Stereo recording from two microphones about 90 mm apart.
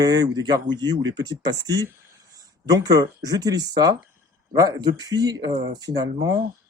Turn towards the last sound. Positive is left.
turn(degrees=-45)  # may be behind; listen again after turning